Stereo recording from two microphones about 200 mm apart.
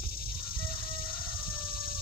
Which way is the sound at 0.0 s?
50° left (ahead or behind).